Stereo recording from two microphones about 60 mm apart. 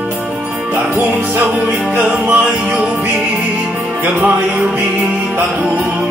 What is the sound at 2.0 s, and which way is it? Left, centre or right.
Music, right.